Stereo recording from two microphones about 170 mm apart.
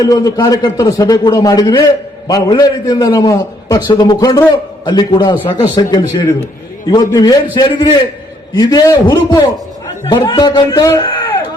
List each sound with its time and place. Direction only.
0.0 s a man's voice: 20° left (ahead or behind)